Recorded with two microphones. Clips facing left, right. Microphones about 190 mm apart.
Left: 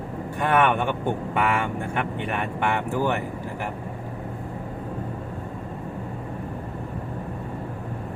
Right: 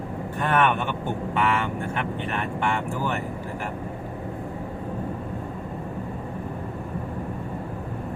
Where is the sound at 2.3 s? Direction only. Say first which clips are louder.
Even; 15° left (ahead or behind).